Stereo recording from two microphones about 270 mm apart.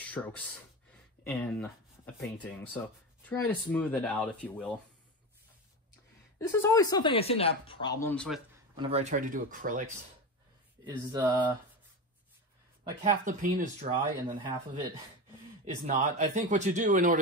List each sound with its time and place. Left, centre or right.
0.1 s speech: centre
6.4 s a woman's voice: centre
7.8 s a woman's voice: centre
8.7 s a man's voice: right
10.9 s a sound: centre
13.0 s a man's voice: right
15.6 s a man's voice: right